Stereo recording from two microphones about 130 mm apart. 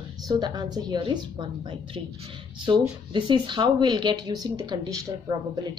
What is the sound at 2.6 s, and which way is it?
Speech, 35° right (ahead or behind).